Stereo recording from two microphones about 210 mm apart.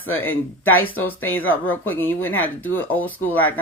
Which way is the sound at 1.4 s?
75° left (ahead or behind).